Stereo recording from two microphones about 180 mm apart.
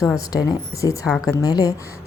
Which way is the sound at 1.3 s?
20° left (ahead or behind).